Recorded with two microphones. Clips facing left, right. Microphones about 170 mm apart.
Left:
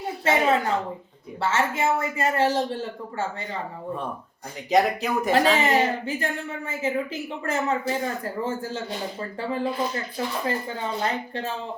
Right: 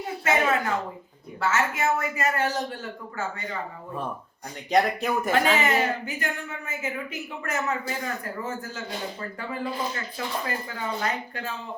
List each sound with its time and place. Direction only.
0.3 s a sound: 30° left (ahead or behind)
1.4 s speech: 30° left (ahead or behind)
4.7 s speech: centre (ahead or behind)
5.6 s speech: 30° left (ahead or behind)